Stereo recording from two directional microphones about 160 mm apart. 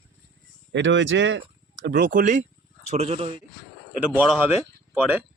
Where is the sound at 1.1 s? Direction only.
90° right.